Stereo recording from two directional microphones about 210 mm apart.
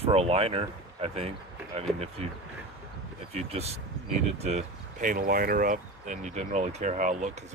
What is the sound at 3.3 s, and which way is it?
Speech, 30° right (ahead or behind).